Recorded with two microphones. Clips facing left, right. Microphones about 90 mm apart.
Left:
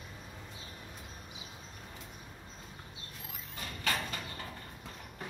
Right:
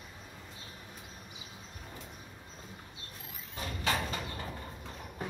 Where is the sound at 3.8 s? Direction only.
20° right (ahead or behind).